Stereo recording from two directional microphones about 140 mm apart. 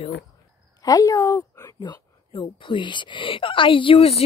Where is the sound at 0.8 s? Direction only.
25° left (ahead or behind).